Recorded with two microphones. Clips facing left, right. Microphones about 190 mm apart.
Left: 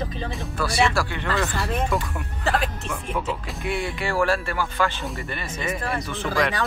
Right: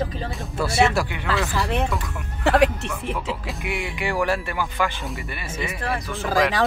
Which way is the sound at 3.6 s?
15° right (ahead or behind).